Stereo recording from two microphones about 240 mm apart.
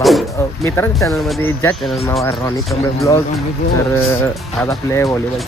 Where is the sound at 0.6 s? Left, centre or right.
Centre.